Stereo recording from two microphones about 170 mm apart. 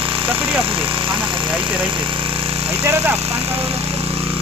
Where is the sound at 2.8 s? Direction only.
15° right (ahead or behind).